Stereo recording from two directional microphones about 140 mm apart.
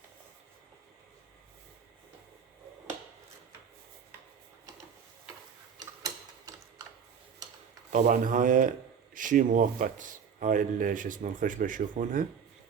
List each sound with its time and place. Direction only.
7.9 s speech: 60° right (ahead or behind)